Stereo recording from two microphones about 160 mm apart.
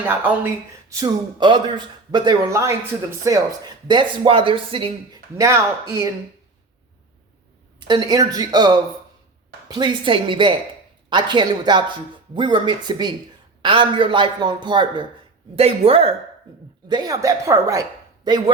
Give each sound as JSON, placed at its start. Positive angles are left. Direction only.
{"t": 0.0, "sound": "a man's voice", "side_deg": -10}
{"t": 5.4, "sound": "speech", "side_deg": -20}
{"t": 7.8, "sound": "a man's voice", "side_deg": -30}
{"t": 16.9, "sound": "speech", "side_deg": -25}